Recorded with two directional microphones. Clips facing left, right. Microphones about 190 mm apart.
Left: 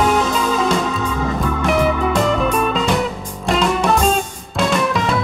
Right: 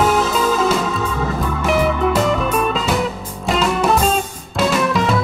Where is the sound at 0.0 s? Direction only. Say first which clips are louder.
Right 1 dB; centre (ahead or behind).